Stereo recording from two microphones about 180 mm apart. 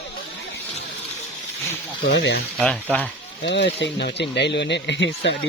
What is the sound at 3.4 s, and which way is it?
Speech, 75° left (ahead or behind).